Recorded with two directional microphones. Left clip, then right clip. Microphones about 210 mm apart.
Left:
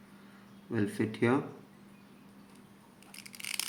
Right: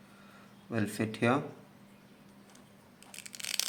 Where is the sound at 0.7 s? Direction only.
20° right (ahead or behind).